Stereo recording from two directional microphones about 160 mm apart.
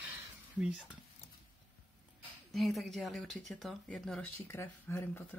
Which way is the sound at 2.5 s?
Centre (ahead or behind).